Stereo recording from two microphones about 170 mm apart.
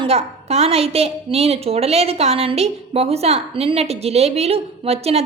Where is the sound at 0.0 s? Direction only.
35° right (ahead or behind).